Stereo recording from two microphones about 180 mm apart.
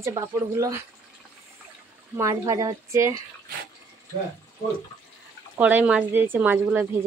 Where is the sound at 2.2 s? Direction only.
15° right (ahead or behind).